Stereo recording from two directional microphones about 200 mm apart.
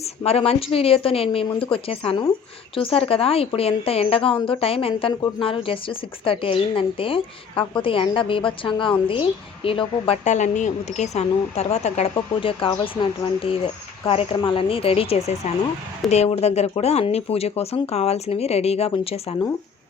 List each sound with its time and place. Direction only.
0.2 s a woman's voice: 30° left (ahead or behind)